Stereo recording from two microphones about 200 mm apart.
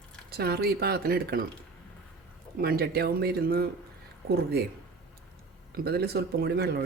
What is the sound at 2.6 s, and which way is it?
Speech, 50° right (ahead or behind).